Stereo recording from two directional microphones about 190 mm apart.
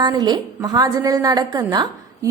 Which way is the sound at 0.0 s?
20° right (ahead or behind).